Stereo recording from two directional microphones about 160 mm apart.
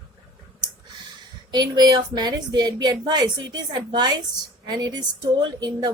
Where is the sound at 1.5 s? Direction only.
25° right (ahead or behind).